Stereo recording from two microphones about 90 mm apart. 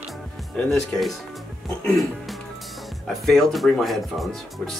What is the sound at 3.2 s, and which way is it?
Speech, centre (ahead or behind).